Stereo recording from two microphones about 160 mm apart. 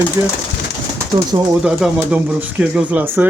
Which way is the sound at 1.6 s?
5° right (ahead or behind).